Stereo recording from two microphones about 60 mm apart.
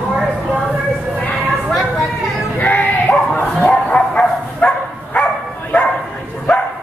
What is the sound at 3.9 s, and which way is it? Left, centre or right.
Dog, centre.